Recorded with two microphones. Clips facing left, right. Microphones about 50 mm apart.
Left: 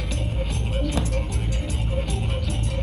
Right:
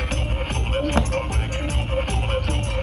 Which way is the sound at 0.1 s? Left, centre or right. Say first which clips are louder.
Right 3 dB; right.